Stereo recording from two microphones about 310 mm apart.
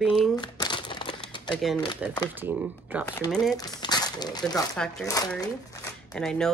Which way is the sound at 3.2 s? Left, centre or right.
Centre.